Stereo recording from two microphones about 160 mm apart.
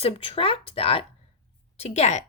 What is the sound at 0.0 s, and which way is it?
A woman's voice, 35° left (ahead or behind).